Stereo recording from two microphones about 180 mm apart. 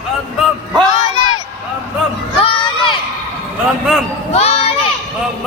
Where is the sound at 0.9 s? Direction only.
35° left (ahead or behind).